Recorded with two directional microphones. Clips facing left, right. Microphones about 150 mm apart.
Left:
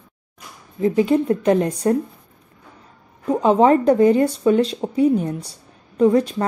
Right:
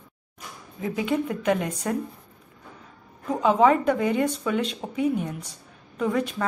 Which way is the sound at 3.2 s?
30° left (ahead or behind).